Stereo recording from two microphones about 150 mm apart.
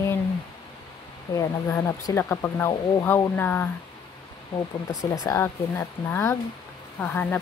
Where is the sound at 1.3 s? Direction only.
20° left (ahead or behind).